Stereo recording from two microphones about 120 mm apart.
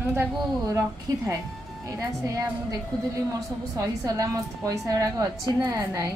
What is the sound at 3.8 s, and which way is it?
A woman's voice, 30° right (ahead or behind).